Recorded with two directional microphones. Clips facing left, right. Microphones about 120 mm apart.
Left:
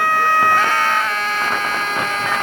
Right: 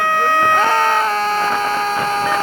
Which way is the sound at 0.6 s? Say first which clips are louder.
Right 4 dB; 35° right (ahead or behind).